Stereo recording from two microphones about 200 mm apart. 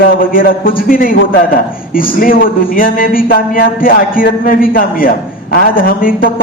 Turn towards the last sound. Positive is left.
turn(degrees=45)  # may be behind; listen again after turning